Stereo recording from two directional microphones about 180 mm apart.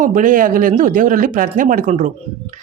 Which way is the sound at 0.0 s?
45° right (ahead or behind).